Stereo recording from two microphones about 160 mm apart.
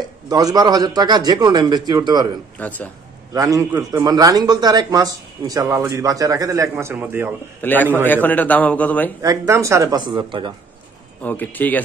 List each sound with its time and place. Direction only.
0.3 s speech: 25° right (ahead or behind)
2.6 s a man's voice: 10° left (ahead or behind)
3.3 s a man's voice: 20° right (ahead or behind)
7.6 s a man's voice: 10° left (ahead or behind)
9.4 s speech: 20° right (ahead or behind)
11.2 s a man's voice: 10° left (ahead or behind)